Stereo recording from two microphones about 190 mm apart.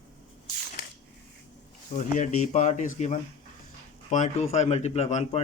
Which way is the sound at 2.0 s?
40° left (ahead or behind).